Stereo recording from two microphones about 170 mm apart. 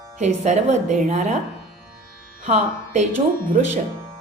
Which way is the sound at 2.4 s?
45° right (ahead or behind).